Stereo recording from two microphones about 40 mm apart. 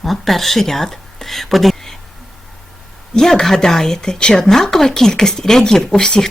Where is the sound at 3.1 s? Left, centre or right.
Centre.